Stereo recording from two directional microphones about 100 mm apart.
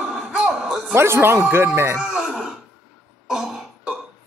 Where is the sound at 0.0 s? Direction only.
5° right (ahead or behind).